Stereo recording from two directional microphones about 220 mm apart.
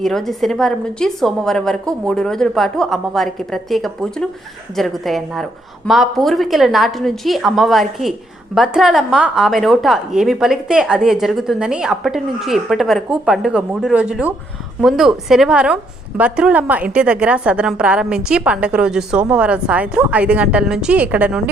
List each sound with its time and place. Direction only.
0.0 s a woman's voice: centre (ahead or behind)